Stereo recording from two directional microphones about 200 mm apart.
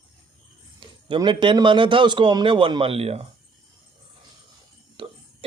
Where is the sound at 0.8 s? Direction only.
25° right (ahead or behind).